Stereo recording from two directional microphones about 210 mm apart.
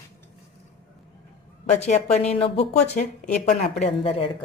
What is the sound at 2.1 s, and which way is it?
Speech, 30° left (ahead or behind).